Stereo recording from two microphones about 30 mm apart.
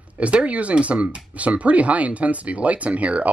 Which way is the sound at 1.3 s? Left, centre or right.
Right.